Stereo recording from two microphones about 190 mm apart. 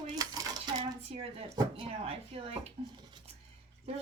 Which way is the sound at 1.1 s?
30° right (ahead or behind).